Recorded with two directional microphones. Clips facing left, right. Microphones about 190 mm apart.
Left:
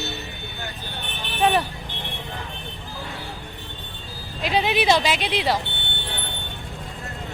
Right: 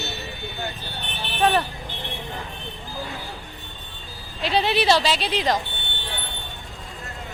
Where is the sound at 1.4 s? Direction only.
15° left (ahead or behind).